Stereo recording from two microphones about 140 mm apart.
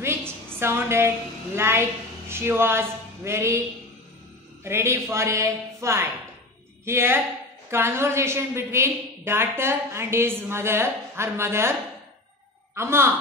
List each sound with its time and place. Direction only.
0.6 s a woman's voice: 20° right (ahead or behind)
4.6 s a woman's voice: 20° right (ahead or behind)
12.7 s a woman's voice: 20° right (ahead or behind)